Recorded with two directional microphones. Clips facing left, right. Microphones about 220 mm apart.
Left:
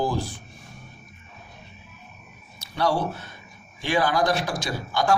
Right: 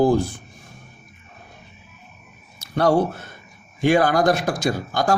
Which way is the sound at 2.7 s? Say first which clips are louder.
Right 6 dB; 50° right (ahead or behind).